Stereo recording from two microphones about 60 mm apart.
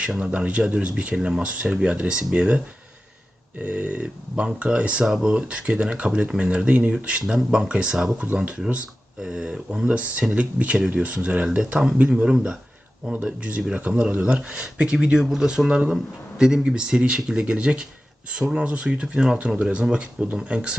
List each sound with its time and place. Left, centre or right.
0.0 s speech: centre
3.6 s speech: right
15.2 s speech: centre